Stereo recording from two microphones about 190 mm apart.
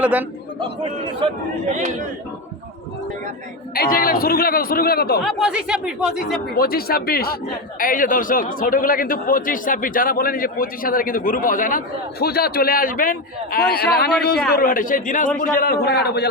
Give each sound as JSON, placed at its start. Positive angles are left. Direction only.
{"t": 0.0, "sound": "a man's voice", "side_deg": -10}
{"t": 1.6, "sound": "speech", "side_deg": -40}
{"t": 3.8, "sound": "speech", "side_deg": 50}
{"t": 5.2, "sound": "speech", "side_deg": 0}
{"t": 6.6, "sound": "a man's voice", "side_deg": 50}